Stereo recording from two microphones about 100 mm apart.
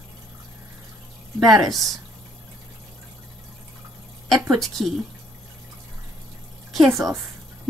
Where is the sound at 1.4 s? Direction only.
Centre (ahead or behind).